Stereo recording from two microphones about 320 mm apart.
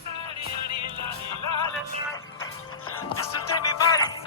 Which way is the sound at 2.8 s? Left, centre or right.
Left.